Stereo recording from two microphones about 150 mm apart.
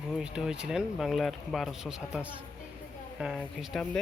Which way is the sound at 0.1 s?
5° right (ahead or behind).